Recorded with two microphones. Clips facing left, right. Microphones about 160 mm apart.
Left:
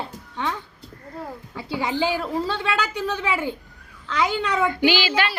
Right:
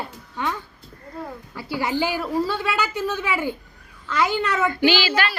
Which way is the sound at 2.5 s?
10° right (ahead or behind).